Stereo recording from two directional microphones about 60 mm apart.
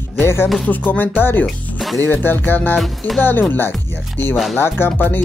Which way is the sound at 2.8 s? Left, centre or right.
Centre.